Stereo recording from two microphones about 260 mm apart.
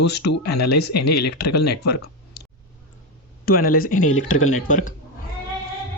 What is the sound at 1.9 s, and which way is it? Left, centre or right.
Clicking, left.